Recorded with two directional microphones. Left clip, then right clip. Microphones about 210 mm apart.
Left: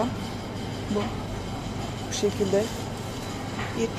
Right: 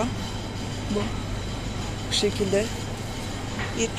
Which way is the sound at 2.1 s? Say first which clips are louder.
Right 1 dB; centre (ahead or behind).